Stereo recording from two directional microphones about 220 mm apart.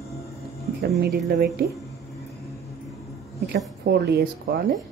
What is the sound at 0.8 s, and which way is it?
Speech, 45° right (ahead or behind).